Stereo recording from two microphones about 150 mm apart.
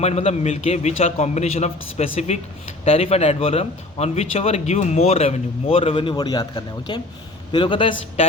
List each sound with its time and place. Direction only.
0.0 s a man's voice: 45° left (ahead or behind)